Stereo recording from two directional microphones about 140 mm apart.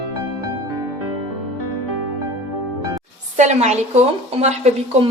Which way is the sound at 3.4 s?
55° right (ahead or behind).